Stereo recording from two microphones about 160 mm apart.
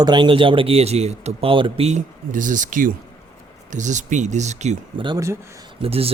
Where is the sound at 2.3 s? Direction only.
55° right (ahead or behind).